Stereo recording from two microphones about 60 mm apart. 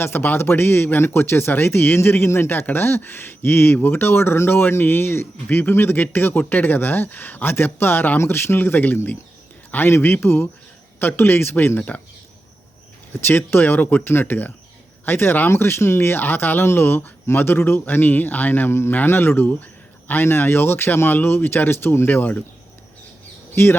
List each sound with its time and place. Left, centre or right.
0.0 s speech: left
8.2 s speech: left
13.2 s speech: left